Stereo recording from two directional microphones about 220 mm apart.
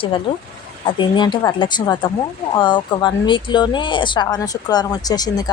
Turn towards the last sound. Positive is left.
turn(degrees=15)  # may be behind; listen again after turning